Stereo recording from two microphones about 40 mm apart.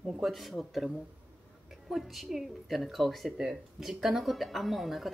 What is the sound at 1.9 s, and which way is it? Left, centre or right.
A woman's voice, centre.